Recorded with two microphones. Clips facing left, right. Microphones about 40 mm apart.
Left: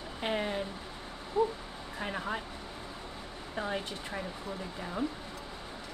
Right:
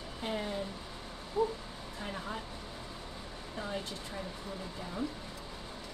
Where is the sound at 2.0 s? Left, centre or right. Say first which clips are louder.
Left 5 dB; left.